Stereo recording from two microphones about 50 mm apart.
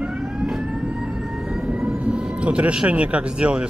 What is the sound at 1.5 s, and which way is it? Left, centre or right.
Speech, centre.